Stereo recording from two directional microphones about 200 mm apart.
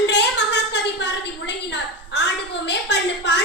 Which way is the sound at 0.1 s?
60° left (ahead or behind).